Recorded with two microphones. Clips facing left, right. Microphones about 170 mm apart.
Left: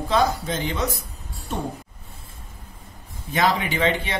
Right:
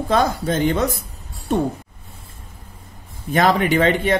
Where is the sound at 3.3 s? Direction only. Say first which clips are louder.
Right 6 dB; 50° right (ahead or behind).